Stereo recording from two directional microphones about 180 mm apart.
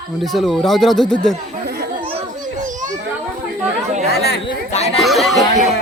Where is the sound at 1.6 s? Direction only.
65° right (ahead or behind).